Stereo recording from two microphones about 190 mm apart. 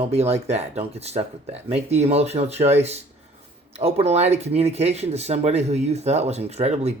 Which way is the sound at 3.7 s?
35° right (ahead or behind).